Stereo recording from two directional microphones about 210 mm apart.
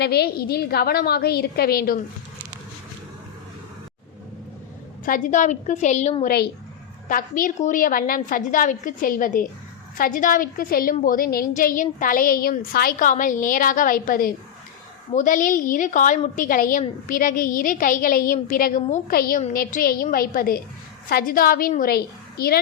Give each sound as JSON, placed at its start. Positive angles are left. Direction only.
{"t": 0.0, "sound": "a woman's voice", "side_deg": 50}
{"t": 5.0, "sound": "a woman's voice", "side_deg": 40}